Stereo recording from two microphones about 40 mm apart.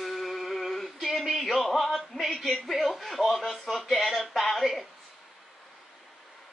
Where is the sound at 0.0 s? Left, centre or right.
Centre.